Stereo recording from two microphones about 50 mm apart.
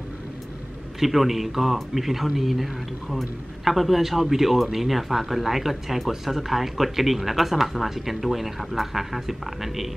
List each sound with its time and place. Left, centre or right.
0.9 s speech: centre